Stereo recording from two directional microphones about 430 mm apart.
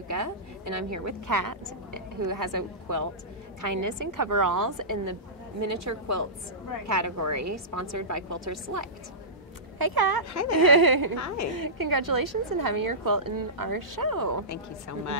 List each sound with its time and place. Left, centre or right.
0.1 s a woman's voice: right
9.8 s speech: right
10.3 s speech: left
10.6 s a woman's voice: right
11.1 s speech: left
11.5 s a woman's voice: right
14.5 s speech: left